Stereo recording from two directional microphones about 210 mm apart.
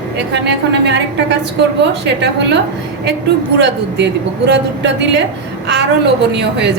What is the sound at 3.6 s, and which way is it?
A woman's voice, 55° right (ahead or behind).